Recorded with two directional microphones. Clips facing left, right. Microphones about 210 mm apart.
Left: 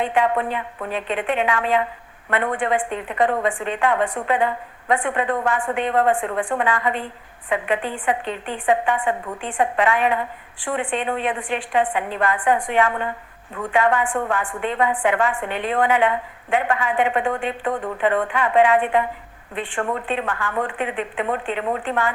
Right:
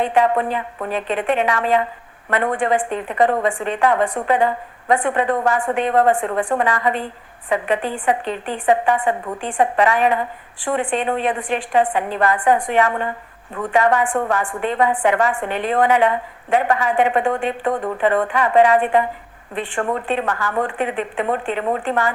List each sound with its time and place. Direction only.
0.0 s a woman's voice: 40° right (ahead or behind)